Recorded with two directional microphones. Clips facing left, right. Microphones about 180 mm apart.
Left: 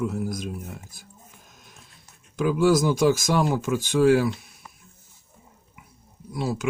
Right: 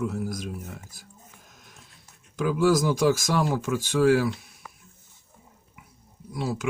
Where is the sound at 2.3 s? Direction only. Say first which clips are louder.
Left 2 dB; 20° left (ahead or behind).